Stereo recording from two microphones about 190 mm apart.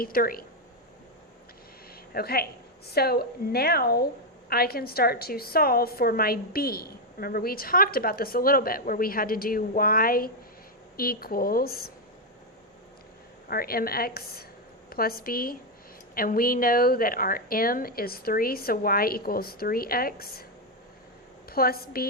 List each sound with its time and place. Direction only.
0.0 s a woman's voice: 50° left (ahead or behind)
2.1 s a woman's voice: 55° left (ahead or behind)
13.5 s a woman's voice: 50° left (ahead or behind)
21.5 s a woman's voice: 50° left (ahead or behind)